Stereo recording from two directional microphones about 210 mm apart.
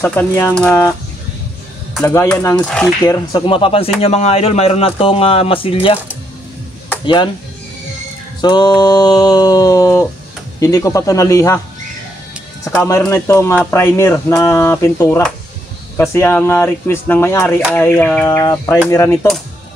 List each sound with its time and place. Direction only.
0.0 s speech: 10° left (ahead or behind)
2.0 s speech: 10° left (ahead or behind)
2.6 s a sound: 5° left (ahead or behind)
3.1 s speech: 20° left (ahead or behind)
8.4 s speech: 20° left (ahead or behind)
12.6 s speech: 15° left (ahead or behind)